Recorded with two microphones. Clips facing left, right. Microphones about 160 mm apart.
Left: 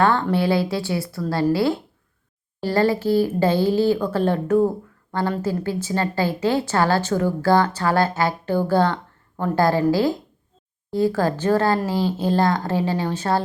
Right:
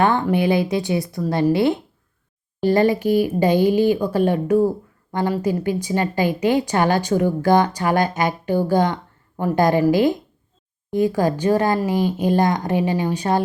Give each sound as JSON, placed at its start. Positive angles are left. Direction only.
{"t": 0.0, "sound": "a woman's voice", "side_deg": -15}